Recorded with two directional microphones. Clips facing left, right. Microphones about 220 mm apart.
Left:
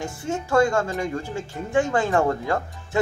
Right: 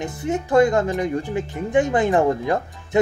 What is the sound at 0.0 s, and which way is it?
Speech, 20° right (ahead or behind).